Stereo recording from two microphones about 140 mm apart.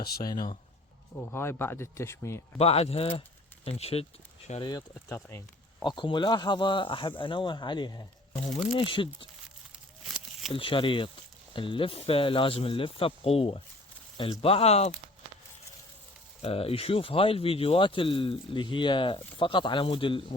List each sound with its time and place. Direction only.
0.2 s speech: 25° left (ahead or behind)
1.2 s speech: 15° left (ahead or behind)
2.6 s speech: 45° left (ahead or behind)
5.0 s speech: 20° left (ahead or behind)
5.8 s speech: 35° left (ahead or behind)
10.5 s speech: 40° left (ahead or behind)
16.4 s speech: 45° left (ahead or behind)